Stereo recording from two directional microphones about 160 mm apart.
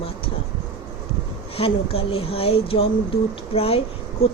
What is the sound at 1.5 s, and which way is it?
Speech, 40° left (ahead or behind).